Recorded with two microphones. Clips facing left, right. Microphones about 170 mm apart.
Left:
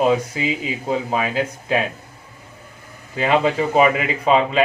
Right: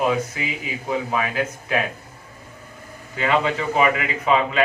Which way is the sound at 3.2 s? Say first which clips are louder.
Left 3 dB; 25° left (ahead or behind).